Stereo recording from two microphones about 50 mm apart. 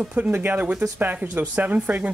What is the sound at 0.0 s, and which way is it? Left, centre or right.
Speech, right.